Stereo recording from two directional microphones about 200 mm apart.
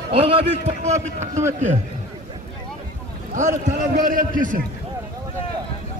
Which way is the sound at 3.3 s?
40° right (ahead or behind).